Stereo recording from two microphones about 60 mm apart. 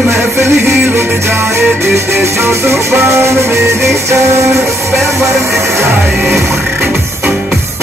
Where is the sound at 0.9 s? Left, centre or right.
Right.